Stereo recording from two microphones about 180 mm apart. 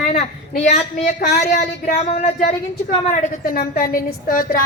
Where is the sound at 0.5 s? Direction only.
40° left (ahead or behind).